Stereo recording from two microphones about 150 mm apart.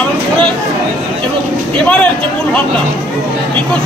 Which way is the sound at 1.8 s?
5° left (ahead or behind).